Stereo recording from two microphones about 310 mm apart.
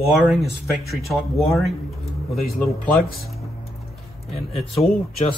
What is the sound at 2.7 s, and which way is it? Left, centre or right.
Speech, left.